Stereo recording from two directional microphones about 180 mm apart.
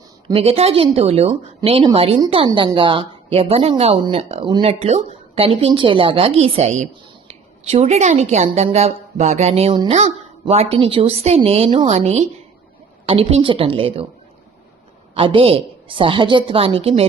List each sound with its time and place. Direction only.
0.3 s a woman's voice: 30° right (ahead or behind)
15.1 s a woman's voice: 30° right (ahead or behind)